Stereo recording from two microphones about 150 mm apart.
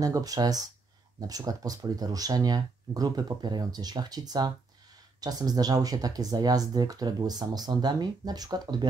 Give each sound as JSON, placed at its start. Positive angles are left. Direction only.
{"t": 0.0, "sound": "speech", "side_deg": -25}